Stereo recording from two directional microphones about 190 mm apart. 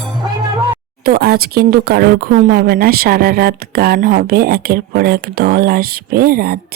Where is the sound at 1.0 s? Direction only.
55° right (ahead or behind).